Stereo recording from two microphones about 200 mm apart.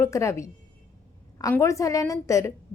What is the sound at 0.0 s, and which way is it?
A woman's voice, 15° left (ahead or behind).